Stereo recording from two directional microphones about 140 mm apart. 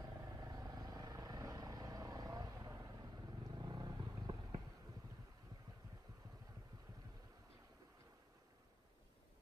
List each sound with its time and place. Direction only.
0.0 s vehicle: 25° right (ahead or behind)